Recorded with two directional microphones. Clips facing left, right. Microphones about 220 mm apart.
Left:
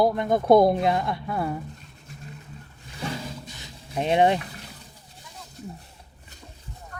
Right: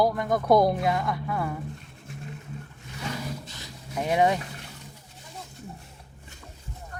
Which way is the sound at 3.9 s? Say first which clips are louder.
Left 3 dB; 25° left (ahead or behind).